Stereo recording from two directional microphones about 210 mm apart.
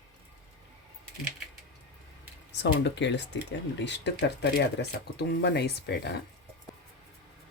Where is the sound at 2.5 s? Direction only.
55° left (ahead or behind).